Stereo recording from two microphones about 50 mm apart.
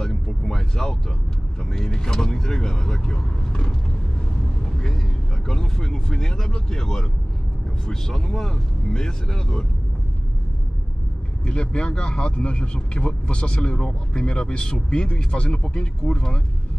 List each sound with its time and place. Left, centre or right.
0.0 s a sound: centre
1.6 s speech: centre
4.8 s speech: centre
11.4 s speech: centre